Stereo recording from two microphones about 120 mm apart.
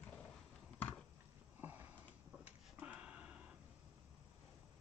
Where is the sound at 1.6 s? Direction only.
15° right (ahead or behind).